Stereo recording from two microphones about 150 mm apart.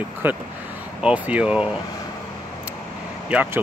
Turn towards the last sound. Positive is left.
turn(degrees=-10)  # may be behind; listen again after turning